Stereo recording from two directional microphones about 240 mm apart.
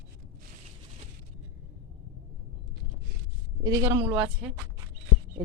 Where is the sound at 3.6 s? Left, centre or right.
Centre.